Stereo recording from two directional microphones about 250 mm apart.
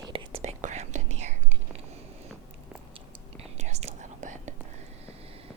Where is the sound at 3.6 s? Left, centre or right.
Right.